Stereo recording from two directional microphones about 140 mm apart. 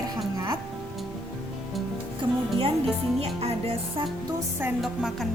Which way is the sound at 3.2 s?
45° right (ahead or behind).